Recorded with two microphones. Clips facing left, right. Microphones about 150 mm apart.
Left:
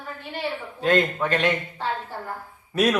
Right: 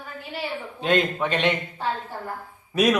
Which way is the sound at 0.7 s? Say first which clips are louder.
Left 1 dB; 20° right (ahead or behind).